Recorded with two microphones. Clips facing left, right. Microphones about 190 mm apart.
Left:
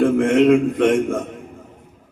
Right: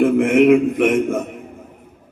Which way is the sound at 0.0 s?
20° right (ahead or behind).